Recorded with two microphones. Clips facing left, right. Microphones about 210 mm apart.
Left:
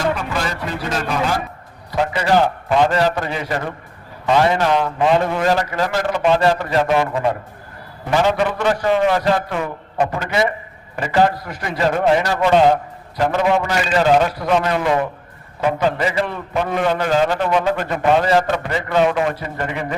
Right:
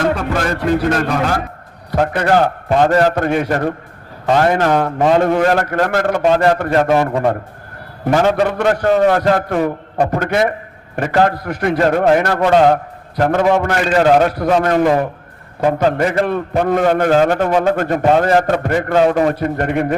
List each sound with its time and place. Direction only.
0.3 s a man's voice: 55° right (ahead or behind)
19.3 s a man's voice: 55° right (ahead or behind)